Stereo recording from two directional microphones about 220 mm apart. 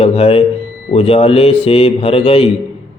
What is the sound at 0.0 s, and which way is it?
Speech, 25° left (ahead or behind).